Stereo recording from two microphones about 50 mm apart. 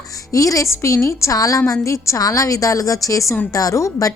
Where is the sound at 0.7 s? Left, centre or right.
Left.